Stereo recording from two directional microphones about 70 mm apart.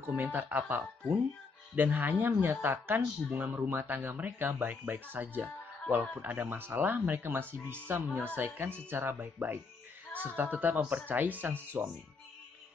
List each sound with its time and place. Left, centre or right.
0.1 s speech: right